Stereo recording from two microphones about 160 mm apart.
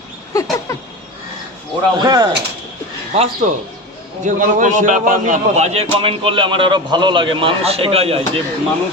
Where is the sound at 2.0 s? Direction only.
25° right (ahead or behind).